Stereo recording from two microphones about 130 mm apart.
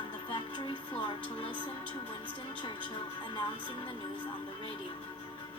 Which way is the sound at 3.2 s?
40° left (ahead or behind).